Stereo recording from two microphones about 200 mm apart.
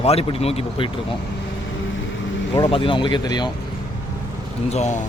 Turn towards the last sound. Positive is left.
turn(degrees=35)  # may be behind; listen again after turning